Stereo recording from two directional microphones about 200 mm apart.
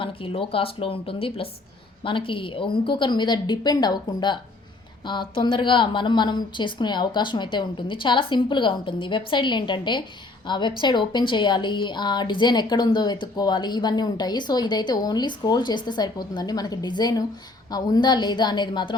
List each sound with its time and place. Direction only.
0.0 s a woman's voice: 25° left (ahead or behind)